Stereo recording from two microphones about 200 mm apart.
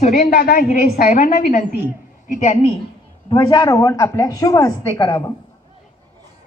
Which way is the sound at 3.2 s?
20° left (ahead or behind).